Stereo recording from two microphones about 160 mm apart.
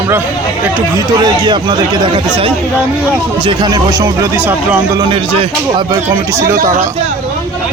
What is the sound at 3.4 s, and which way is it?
Speech, 30° right (ahead or behind).